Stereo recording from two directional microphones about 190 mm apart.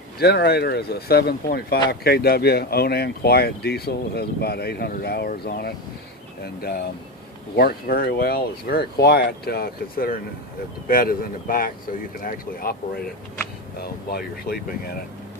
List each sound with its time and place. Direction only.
0.2 s speech: 55° left (ahead or behind)
13.8 s speech: 55° left (ahead or behind)